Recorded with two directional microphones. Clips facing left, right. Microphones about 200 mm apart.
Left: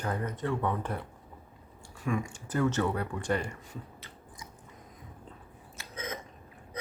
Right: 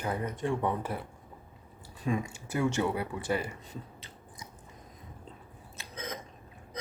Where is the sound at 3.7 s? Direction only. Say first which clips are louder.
Even; 20° right (ahead or behind).